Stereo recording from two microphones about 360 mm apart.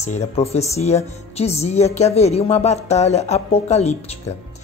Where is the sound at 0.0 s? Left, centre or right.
Centre.